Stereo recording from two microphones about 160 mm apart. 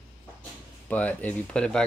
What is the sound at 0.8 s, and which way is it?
Speech, 10° left (ahead or behind).